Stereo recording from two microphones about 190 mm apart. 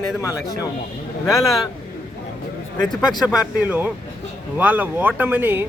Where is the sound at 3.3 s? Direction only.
10° right (ahead or behind).